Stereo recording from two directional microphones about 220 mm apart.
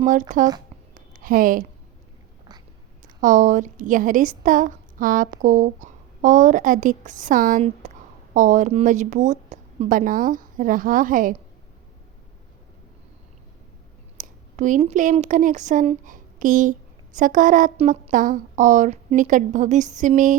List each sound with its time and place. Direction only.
0.0 s a woman's voice: 35° right (ahead or behind)
0.9 s a sound: 40° right (ahead or behind)
3.2 s a woman's voice: 35° right (ahead or behind)
14.2 s a woman's voice: 35° right (ahead or behind)